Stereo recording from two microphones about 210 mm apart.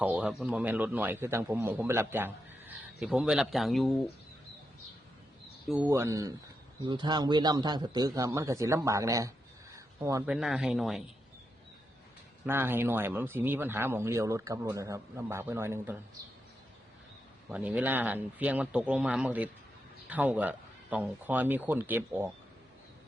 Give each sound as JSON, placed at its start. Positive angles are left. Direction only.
{"t": 0.0, "sound": "a man's voice", "side_deg": -5}
{"t": 5.6, "sound": "a man's voice", "side_deg": -5}
{"t": 9.7, "sound": "a sound", "side_deg": -15}
{"t": 10.3, "sound": "speech", "side_deg": 0}
{"t": 12.5, "sound": "a man's voice", "side_deg": -10}
{"t": 17.5, "sound": "a man's voice", "side_deg": -5}